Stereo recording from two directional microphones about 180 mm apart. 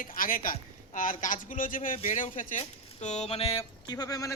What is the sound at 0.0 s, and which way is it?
Speech, 50° left (ahead or behind).